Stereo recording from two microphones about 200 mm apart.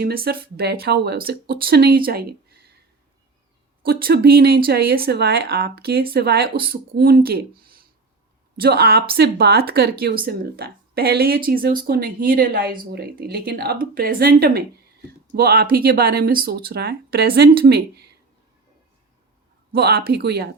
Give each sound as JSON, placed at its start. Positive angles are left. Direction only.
{"t": 0.0, "sound": "speech", "side_deg": -50}
{"t": 3.8, "sound": "speech", "side_deg": -50}
{"t": 19.7, "sound": "speech", "side_deg": -50}